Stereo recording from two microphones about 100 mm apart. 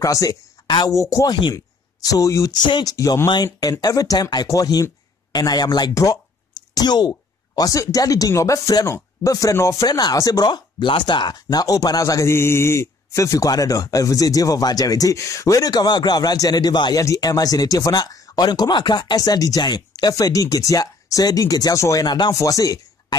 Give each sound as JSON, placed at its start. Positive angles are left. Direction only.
{"t": 0.0, "sound": "speech", "side_deg": 35}
{"t": 2.6, "sound": "speech", "side_deg": 45}
{"t": 17.0, "sound": "speech", "side_deg": 35}
{"t": 22.0, "sound": "speech", "side_deg": 45}
{"t": 22.3, "sound": "speech", "side_deg": 35}